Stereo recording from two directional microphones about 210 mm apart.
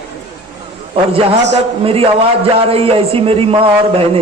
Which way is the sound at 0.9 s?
25° right (ahead or behind).